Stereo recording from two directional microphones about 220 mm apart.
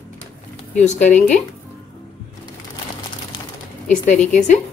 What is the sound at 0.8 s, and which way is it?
Speech, 35° left (ahead or behind).